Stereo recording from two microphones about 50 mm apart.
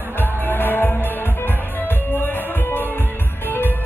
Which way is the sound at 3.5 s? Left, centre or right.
Left.